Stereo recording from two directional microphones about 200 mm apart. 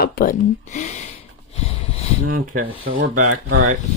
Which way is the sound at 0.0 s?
45° left (ahead or behind).